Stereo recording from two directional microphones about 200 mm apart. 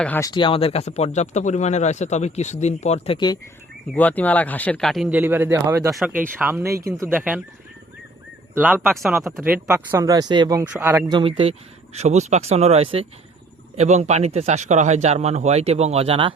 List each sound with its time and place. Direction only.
0.0 s speech: 10° left (ahead or behind)
0.3 s speech: 25° left (ahead or behind)
3.9 s speech: 10° left (ahead or behind); by 7.4 s 10° right (ahead or behind)
8.5 s speech: 10° right (ahead or behind)
11.1 s a man's voice: 25° right (ahead or behind)